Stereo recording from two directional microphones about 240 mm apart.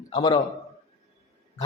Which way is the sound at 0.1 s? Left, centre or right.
Centre.